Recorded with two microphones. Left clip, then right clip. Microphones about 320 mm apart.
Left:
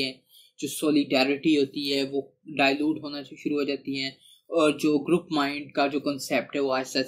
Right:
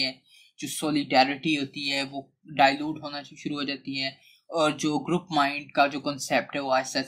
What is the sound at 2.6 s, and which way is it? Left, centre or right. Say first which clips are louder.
Speech: right 1 dB; right.